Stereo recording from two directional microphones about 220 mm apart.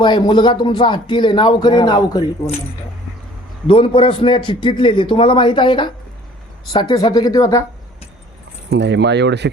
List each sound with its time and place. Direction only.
0.0 s speech: 20° left (ahead or behind)
3.7 s speech: 25° left (ahead or behind)
8.7 s speech: 50° right (ahead or behind)